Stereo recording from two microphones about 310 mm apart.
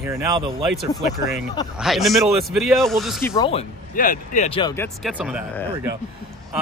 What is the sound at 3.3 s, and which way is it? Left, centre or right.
Speech, centre.